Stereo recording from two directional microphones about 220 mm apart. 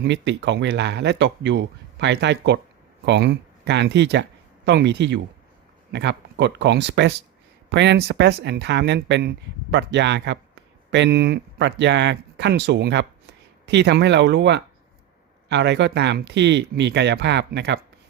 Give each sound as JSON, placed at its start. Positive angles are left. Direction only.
{"t": 0.0, "sound": "speech", "side_deg": -50}